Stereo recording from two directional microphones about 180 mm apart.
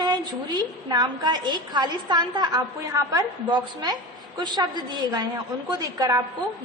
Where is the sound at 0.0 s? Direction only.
20° right (ahead or behind).